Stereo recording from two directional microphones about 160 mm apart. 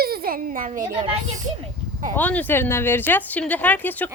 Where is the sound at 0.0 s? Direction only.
70° right (ahead or behind).